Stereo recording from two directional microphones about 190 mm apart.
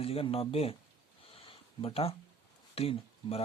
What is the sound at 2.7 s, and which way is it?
Speech, 30° left (ahead or behind).